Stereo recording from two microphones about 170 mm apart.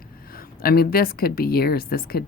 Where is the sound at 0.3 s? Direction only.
60° left (ahead or behind).